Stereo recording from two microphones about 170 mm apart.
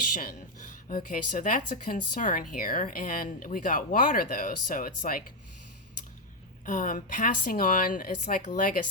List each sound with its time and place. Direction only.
0.1 s speech: 55° left (ahead or behind)
6.7 s speech: 50° left (ahead or behind)